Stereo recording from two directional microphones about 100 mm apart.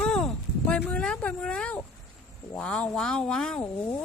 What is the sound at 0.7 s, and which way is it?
Speech, 15° left (ahead or behind).